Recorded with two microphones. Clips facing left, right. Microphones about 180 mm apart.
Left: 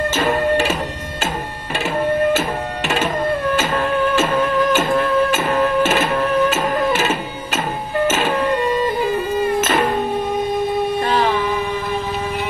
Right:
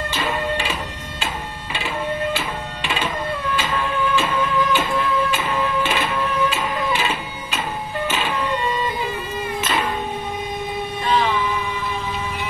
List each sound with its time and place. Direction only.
0.1 s music: 45° left (ahead or behind)
11.0 s music: 50° left (ahead or behind)